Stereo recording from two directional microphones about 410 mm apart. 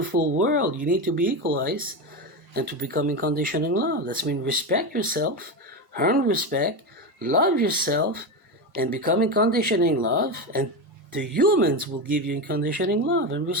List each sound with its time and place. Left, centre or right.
0.1 s speech: centre